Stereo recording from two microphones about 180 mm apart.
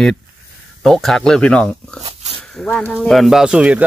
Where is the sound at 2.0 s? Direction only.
35° right (ahead or behind).